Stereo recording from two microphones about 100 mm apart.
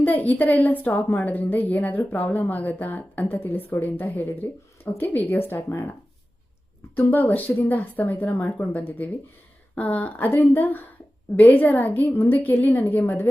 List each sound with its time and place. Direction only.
0.0 s speech: 15° left (ahead or behind)
6.9 s speech: 20° left (ahead or behind)